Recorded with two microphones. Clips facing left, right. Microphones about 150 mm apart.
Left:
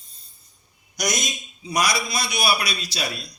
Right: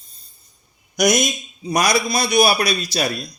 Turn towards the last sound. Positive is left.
turn(degrees=-45)  # may be behind; listen again after turning